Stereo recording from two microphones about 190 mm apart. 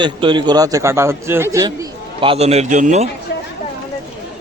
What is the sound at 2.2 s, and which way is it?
Speech, 30° right (ahead or behind).